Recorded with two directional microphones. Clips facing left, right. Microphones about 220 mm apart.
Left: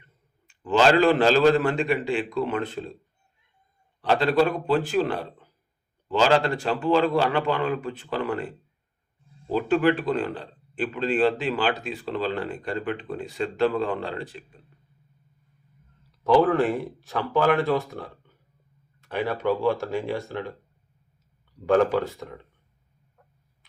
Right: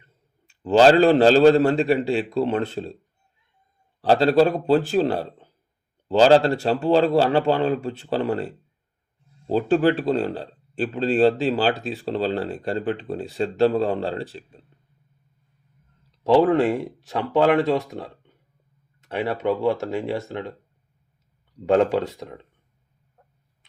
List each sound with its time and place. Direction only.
0.6 s speech: 30° right (ahead or behind)
4.0 s speech: 35° right (ahead or behind)
16.3 s speech: 20° right (ahead or behind)
21.7 s speech: 20° right (ahead or behind)